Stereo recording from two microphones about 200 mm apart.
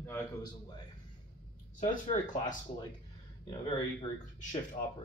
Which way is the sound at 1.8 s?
35° left (ahead or behind).